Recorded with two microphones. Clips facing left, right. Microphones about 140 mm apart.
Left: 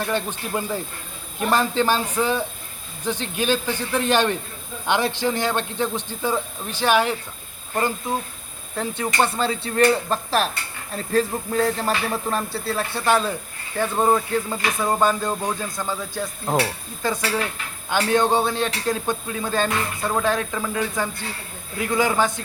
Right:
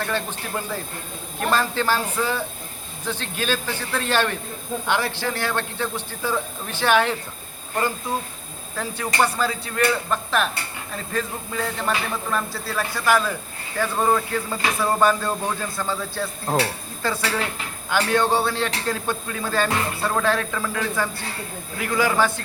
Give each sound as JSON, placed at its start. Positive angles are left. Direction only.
{"t": 0.0, "sound": "a man's voice", "side_deg": 15}
{"t": 8.7, "sound": "a man's voice", "side_deg": 25}